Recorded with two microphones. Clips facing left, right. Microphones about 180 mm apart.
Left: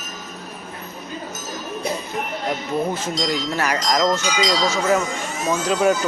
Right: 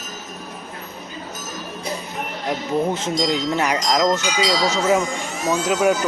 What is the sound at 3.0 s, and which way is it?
Speech, 20° right (ahead or behind).